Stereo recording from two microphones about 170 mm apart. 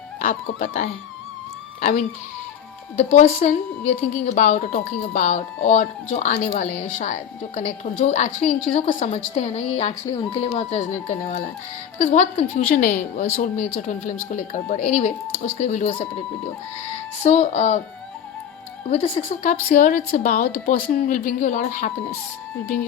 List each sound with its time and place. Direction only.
0.2 s a woman's voice: 50° left (ahead or behind)
17.2 s a woman's voice: 45° left (ahead or behind)
19.0 s a woman's voice: 40° left (ahead or behind)